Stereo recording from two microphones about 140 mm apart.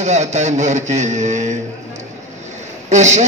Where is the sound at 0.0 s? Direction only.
55° right (ahead or behind).